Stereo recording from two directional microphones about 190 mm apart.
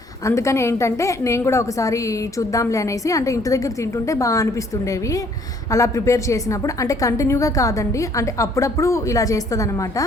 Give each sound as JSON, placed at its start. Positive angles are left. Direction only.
{"t": 0.3, "sound": "a woman's voice", "side_deg": 15}
{"t": 5.7, "sound": "a woman's voice", "side_deg": 15}